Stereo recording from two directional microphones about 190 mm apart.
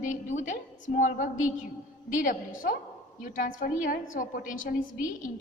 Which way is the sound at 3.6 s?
45° left (ahead or behind).